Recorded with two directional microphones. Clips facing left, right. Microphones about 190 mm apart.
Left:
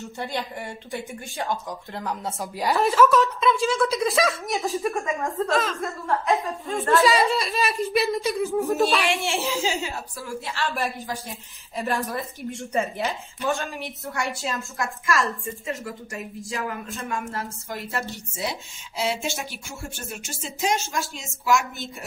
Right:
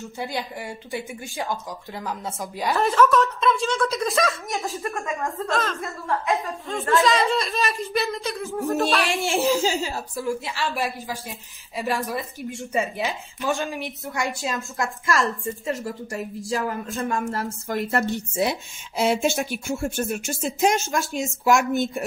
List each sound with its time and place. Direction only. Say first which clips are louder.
0.0 s a woman's voice: even; centre (ahead or behind)
9.1 s a woman's voice: right 4 dB; 40° right (ahead or behind)
10.4 s a woman's voice: right 1 dB; 10° right (ahead or behind)
13.6 s a woman's voice: right 3 dB; 15° right (ahead or behind)
15.2 s a woman's voice: right 3 dB; 30° right (ahead or behind); by 22.0 s 55° right (ahead or behind)